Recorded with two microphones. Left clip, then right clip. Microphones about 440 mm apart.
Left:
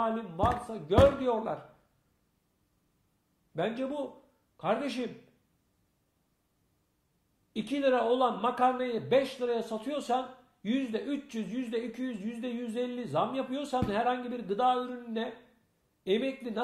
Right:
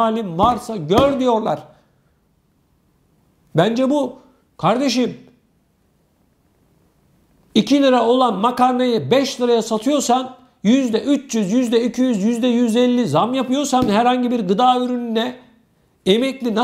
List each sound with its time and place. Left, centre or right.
0.0 s a man's voice: right
3.5 s a man's voice: right
7.5 s a man's voice: right